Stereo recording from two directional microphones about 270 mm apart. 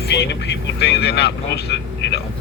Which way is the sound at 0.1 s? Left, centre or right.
Left.